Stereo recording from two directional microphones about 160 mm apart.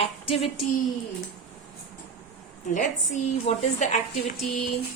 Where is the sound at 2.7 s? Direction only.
50° left (ahead or behind).